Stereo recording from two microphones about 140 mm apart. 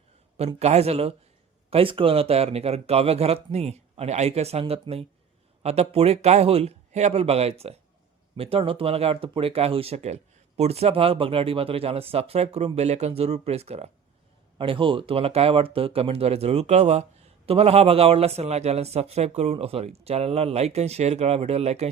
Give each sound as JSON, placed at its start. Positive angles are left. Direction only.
{"t": 0.3, "sound": "speech", "side_deg": -50}